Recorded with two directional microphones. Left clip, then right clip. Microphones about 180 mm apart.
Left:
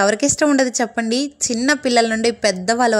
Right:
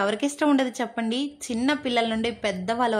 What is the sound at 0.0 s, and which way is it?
A woman's voice, 25° left (ahead or behind).